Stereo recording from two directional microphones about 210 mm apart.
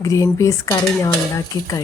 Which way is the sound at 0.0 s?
15° left (ahead or behind).